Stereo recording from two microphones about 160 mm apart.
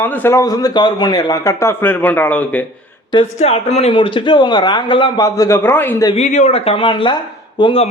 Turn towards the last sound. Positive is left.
turn(degrees=30)  # may be behind; listen again after turning